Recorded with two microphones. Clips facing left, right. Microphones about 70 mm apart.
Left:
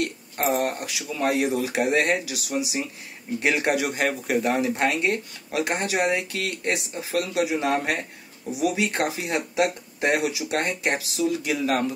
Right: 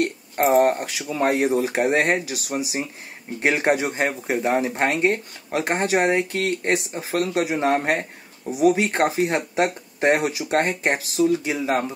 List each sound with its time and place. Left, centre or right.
0.0 s speech: right
11.4 s speech: right